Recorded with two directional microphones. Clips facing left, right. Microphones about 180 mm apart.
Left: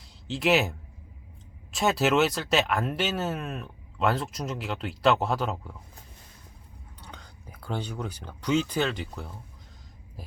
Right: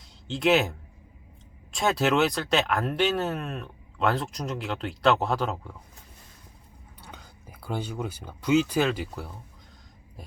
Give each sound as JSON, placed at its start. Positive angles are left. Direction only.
{"t": 0.3, "sound": "speech", "side_deg": 0}
{"t": 7.0, "sound": "speech", "side_deg": -10}